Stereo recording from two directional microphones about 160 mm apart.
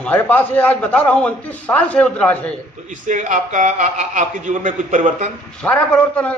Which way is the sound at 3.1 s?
50° right (ahead or behind).